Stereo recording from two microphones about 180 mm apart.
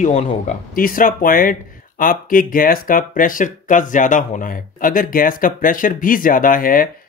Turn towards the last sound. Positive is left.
turn(degrees=50)  # may be behind; listen again after turning